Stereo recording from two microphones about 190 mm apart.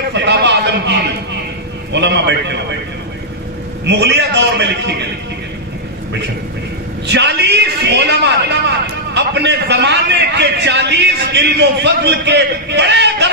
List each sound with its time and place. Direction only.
0.1 s a sound: 65° right (ahead or behind)
1.9 s a man's voice: 65° right (ahead or behind)
3.8 s a man's voice: 65° right (ahead or behind)
7.1 s a man's voice: 60° right (ahead or behind)